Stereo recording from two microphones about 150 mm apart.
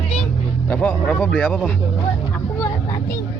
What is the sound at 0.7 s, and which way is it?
Speech, 10° left (ahead or behind).